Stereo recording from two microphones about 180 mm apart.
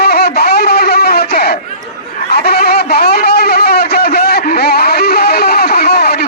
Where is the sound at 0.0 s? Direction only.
60° left (ahead or behind).